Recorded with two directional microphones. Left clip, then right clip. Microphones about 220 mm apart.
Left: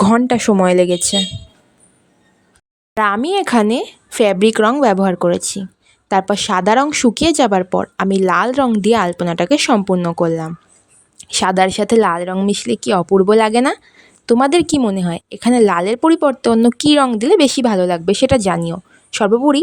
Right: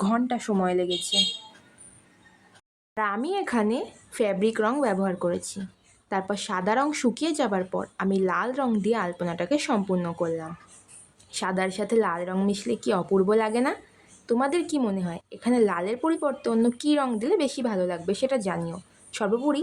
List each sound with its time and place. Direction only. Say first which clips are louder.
0.0 s speech: left 13 dB; 40° left (ahead or behind)
2.9 s a woman's voice: left 12 dB; 45° left (ahead or behind)